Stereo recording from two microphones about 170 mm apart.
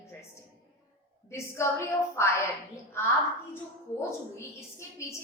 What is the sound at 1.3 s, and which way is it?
A woman's voice, 15° left (ahead or behind).